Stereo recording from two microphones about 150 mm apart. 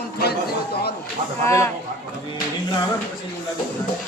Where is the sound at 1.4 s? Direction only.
20° left (ahead or behind).